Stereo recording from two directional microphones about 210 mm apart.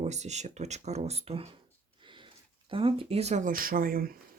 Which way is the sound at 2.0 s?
20° right (ahead or behind).